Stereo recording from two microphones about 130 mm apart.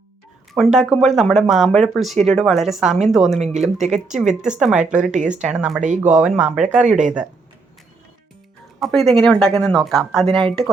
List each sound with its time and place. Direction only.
0.5 s speech: centre (ahead or behind)
3.4 s speech: 60° right (ahead or behind)
4.1 s speech: 5° right (ahead or behind)
6.8 s speech: 70° right (ahead or behind)
8.8 s speech: centre (ahead or behind)